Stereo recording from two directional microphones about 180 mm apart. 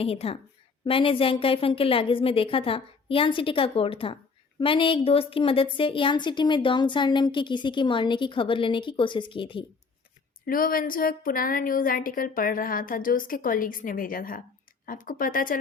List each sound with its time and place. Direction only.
0.0 s a woman's voice: 35° left (ahead or behind)
10.4 s a woman's voice: 50° left (ahead or behind)